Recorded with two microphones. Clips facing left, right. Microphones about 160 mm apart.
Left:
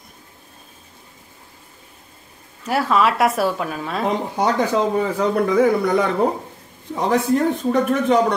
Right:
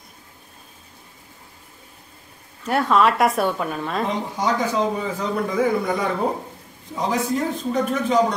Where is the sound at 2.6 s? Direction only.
5° left (ahead or behind).